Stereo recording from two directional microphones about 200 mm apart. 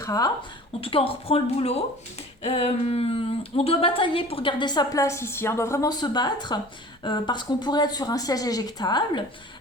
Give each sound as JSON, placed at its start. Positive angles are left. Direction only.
{"t": 0.0, "sound": "a woman's voice", "side_deg": 20}
{"t": 0.8, "sound": "speech", "side_deg": 30}